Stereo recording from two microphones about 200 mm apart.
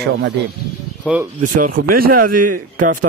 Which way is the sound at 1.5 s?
45° right (ahead or behind).